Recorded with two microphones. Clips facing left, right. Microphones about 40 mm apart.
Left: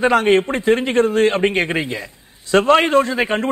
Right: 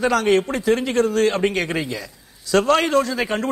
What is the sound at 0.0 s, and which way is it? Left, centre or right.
A man's voice, left.